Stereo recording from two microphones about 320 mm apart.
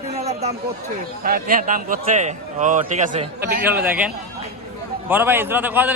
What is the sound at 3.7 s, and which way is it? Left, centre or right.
A man's voice, centre.